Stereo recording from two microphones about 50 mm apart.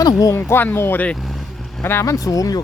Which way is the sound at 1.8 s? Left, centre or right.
Left.